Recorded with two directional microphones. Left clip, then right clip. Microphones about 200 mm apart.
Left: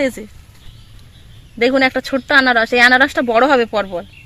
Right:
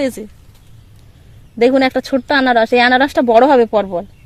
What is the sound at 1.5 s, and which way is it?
Speech, 45° right (ahead or behind).